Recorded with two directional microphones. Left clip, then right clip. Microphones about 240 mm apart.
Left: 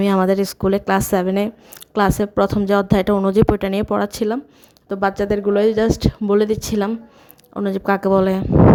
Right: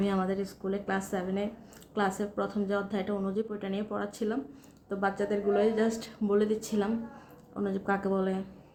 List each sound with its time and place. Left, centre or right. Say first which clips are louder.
0.0 s speech: left 14 dB; left